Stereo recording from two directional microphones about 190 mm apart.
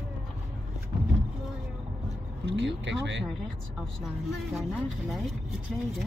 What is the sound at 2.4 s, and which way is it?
Speech, 70° right (ahead or behind).